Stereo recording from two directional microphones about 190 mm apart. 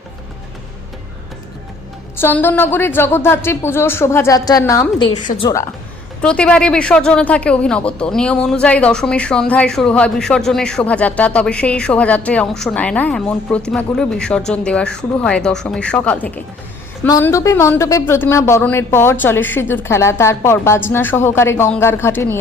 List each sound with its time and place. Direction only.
2.2 s speech: 10° left (ahead or behind)
6.2 s speech: 5° left (ahead or behind)